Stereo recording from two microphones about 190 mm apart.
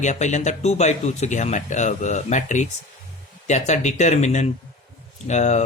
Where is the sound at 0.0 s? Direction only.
40° left (ahead or behind).